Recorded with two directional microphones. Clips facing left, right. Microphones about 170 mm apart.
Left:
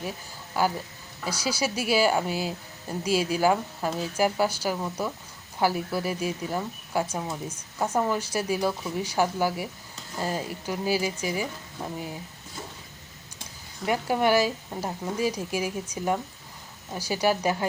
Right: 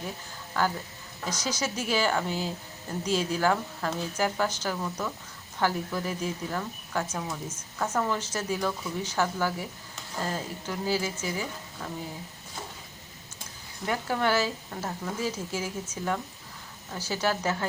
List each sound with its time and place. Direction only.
0.6 s a woman's voice: 10° left (ahead or behind)
4.8 s a woman's voice: 20° left (ahead or behind)
13.8 s a woman's voice: 15° left (ahead or behind)